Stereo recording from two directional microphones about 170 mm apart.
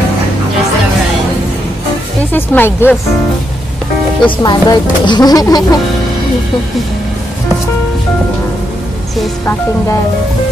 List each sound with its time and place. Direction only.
2.3 s speech: 10° left (ahead or behind)
4.4 s speech: 25° left (ahead or behind)